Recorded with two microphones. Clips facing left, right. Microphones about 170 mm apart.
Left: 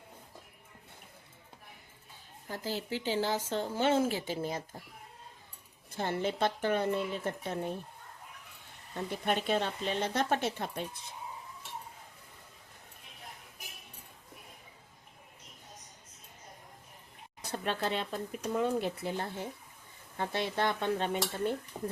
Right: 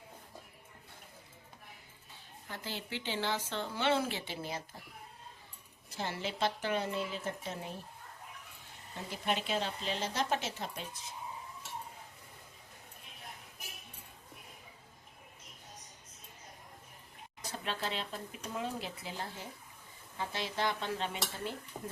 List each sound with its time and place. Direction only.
2.5 s speech: 40° left (ahead or behind)
5.9 s speech: 55° left (ahead or behind)
9.0 s speech: 55° left (ahead or behind)
17.5 s speech: 55° left (ahead or behind)
21.7 s speech: centre (ahead or behind)